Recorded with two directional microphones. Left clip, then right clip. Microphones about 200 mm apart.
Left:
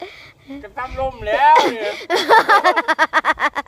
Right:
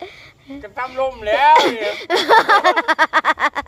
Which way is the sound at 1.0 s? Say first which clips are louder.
Even; 30° right (ahead or behind).